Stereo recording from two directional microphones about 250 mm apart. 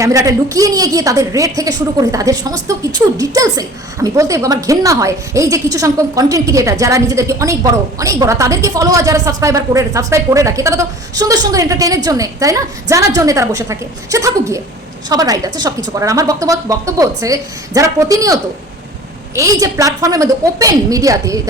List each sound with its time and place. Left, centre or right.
0.0 s a woman's voice: centre
19.4 s a woman's voice: centre